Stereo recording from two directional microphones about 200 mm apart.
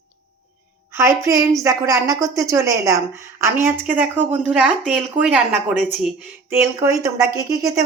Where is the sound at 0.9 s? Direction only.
15° right (ahead or behind).